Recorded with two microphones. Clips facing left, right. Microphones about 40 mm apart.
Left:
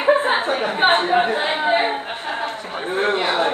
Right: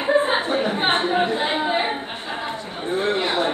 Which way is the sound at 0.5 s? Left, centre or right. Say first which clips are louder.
Left 3 dB; left.